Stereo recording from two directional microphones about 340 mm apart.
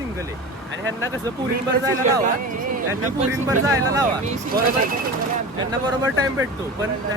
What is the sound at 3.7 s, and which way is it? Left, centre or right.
Speech, centre.